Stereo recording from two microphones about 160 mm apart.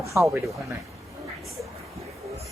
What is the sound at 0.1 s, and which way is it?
Speech, 10° right (ahead or behind).